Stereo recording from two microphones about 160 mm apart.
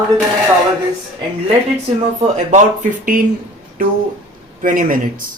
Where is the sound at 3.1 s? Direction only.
60° right (ahead or behind).